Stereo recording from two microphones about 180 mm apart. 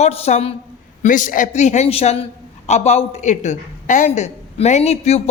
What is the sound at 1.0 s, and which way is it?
A man's voice, 45° left (ahead or behind).